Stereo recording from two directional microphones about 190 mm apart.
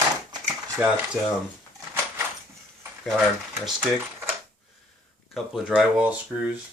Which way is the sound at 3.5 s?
Centre (ahead or behind).